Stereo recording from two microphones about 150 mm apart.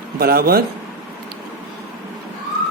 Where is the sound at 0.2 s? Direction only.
90° right.